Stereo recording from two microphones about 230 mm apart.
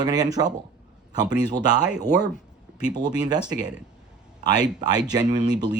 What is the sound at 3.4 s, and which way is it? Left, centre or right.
Speech, centre.